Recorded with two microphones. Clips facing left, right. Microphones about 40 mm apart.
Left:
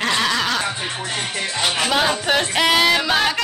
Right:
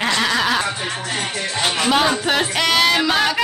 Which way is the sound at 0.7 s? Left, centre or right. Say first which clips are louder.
Right 1 dB; centre.